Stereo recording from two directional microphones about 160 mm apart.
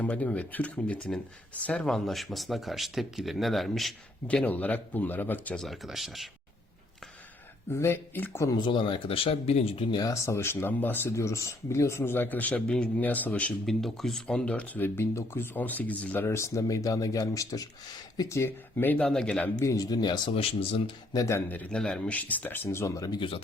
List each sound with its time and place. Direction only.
0.0 s speech: 10° left (ahead or behind)
7.7 s speech: 15° left (ahead or behind); by 10.0 s 35° left (ahead or behind)
10.0 s speech: 20° left (ahead or behind)
19.5 s speech: 20° left (ahead or behind)